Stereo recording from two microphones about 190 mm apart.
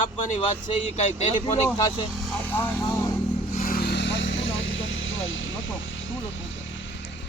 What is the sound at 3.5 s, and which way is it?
Vehicle, 45° left (ahead or behind).